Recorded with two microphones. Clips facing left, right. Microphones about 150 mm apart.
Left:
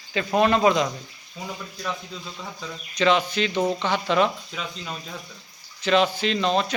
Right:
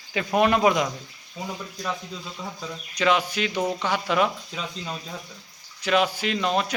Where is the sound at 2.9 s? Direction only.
10° right (ahead or behind).